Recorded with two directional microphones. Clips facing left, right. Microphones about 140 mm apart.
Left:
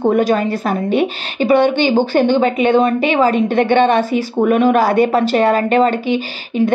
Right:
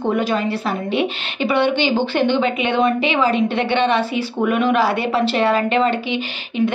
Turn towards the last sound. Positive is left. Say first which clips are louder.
# left 5 dB
turn(degrees=45)  # may be behind; listen again after turning